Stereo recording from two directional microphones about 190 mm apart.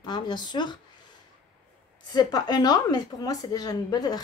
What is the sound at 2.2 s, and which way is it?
A woman's voice, 20° left (ahead or behind).